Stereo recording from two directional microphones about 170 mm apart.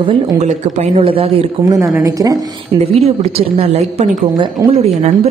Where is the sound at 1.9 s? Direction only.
20° right (ahead or behind).